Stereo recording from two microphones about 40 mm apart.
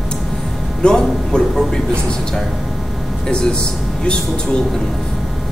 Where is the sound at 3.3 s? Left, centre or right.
Left.